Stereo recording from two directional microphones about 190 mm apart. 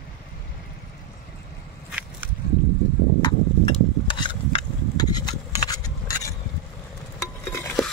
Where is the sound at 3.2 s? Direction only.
25° left (ahead or behind).